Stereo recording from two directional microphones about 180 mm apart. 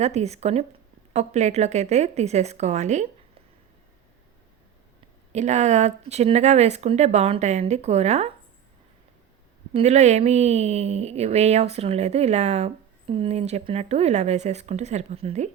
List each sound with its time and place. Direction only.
0.0 s speech: 35° right (ahead or behind)
5.3 s speech: 40° right (ahead or behind)
9.7 s speech: 40° right (ahead or behind)